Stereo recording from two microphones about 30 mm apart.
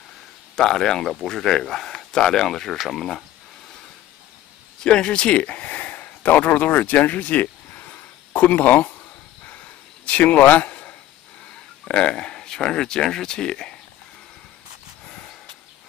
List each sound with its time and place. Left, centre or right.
0.6 s a man's voice: centre
4.7 s speech: left
10.0 s a man's voice: left
10.7 s a sound: left
11.9 s speech: left